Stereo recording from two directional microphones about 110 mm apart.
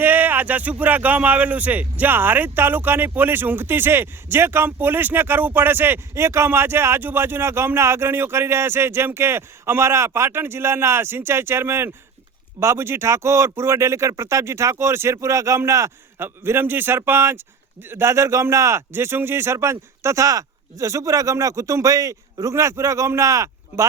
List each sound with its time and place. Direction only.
0.0 s speech: 15° right (ahead or behind)